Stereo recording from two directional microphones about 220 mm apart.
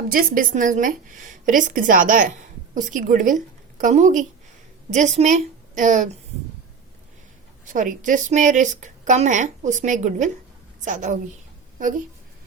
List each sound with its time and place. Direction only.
0.1 s a woman's voice: 40° right (ahead or behind)
7.6 s a woman's voice: 35° right (ahead or behind)